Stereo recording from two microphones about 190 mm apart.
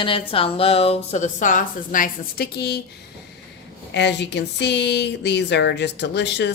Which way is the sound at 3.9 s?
65° left (ahead or behind).